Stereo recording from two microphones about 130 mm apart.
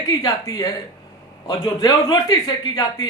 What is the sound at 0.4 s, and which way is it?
Speech, 30° left (ahead or behind).